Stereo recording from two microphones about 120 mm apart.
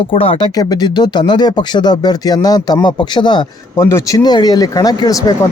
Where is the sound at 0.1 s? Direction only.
50° left (ahead or behind).